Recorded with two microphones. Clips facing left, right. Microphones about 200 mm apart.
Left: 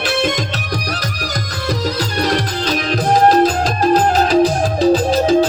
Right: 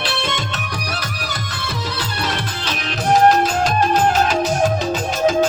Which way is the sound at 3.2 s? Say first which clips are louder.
Left 3 dB; 35° left (ahead or behind).